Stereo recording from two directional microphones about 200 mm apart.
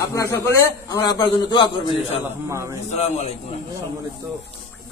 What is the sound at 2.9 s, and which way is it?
Speech, 35° left (ahead or behind).